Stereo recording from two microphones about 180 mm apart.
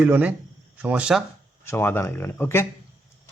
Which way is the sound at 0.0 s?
10° right (ahead or behind).